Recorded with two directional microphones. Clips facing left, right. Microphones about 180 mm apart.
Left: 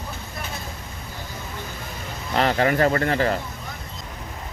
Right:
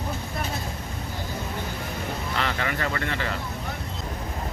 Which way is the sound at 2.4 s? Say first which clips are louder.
Left 11 dB; 40° left (ahead or behind).